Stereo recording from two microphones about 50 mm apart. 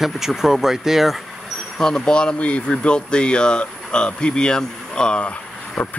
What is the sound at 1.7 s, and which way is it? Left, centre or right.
Speech, centre.